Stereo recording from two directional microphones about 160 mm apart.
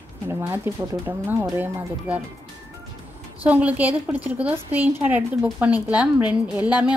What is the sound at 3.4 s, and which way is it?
A woman's voice, 10° right (ahead or behind).